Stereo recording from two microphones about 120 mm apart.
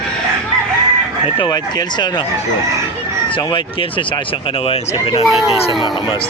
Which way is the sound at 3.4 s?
40° left (ahead or behind).